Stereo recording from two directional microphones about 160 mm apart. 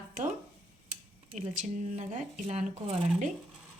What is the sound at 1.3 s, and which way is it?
A woman's voice, 50° right (ahead or behind).